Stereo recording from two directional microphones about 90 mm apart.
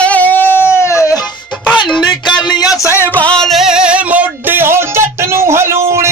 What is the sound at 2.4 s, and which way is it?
Music, 45° left (ahead or behind).